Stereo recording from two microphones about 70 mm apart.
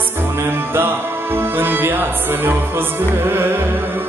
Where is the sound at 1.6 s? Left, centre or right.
Right.